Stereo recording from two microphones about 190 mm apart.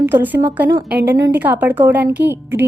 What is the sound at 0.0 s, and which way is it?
A woman's voice, 10° right (ahead or behind).